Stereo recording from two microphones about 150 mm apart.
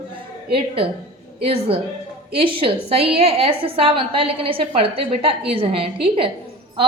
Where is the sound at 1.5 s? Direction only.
40° right (ahead or behind).